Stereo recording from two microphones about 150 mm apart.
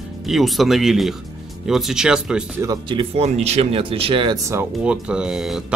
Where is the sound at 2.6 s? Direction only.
25° right (ahead or behind).